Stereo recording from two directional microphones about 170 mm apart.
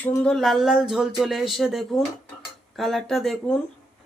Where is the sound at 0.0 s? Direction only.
5° left (ahead or behind).